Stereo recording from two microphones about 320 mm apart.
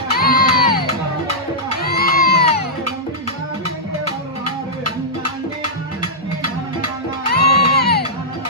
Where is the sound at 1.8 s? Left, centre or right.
Left.